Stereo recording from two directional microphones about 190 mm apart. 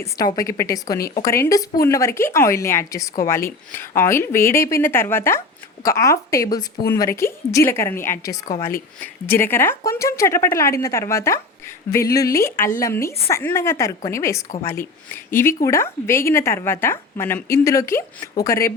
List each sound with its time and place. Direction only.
0.0 s a woman's voice: 20° left (ahead or behind)